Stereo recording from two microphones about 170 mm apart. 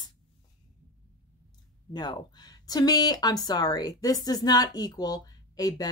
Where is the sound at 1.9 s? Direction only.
25° left (ahead or behind).